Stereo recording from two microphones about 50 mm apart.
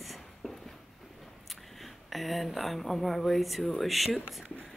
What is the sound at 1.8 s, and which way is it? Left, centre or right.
Speech, centre.